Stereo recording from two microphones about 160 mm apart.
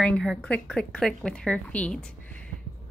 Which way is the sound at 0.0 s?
5° left (ahead or behind).